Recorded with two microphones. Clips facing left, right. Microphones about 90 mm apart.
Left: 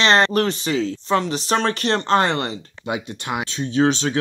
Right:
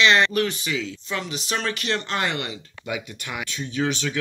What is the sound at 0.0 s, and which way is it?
Speech, 35° left (ahead or behind).